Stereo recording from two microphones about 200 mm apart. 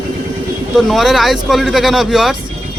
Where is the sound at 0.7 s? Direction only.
Centre (ahead or behind).